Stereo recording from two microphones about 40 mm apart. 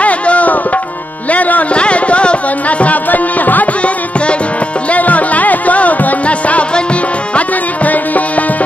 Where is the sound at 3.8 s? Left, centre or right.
Left.